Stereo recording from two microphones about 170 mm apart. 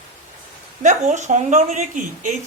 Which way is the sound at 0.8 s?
45° right (ahead or behind).